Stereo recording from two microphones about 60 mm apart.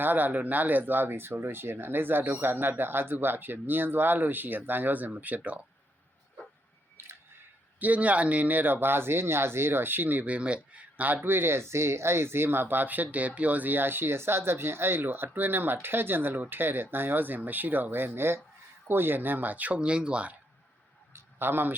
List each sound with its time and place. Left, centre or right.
0.0 s speech: right
7.8 s speech: right
21.1 s a sound: right